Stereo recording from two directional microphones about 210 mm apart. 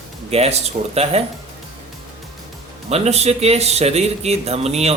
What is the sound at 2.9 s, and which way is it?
Music, 30° right (ahead or behind).